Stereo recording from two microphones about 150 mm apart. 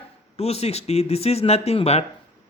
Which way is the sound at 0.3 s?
45° left (ahead or behind).